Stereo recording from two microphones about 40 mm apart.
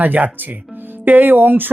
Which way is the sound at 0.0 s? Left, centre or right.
Right.